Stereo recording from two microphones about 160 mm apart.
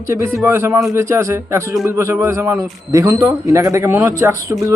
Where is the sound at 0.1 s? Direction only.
15° right (ahead or behind).